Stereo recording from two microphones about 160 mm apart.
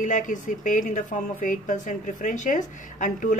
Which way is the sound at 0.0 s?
55° left (ahead or behind).